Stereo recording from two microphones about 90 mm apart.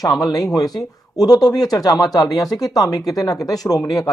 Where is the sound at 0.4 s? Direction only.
40° left (ahead or behind).